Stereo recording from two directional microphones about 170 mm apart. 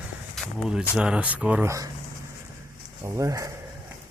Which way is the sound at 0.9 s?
5° right (ahead or behind).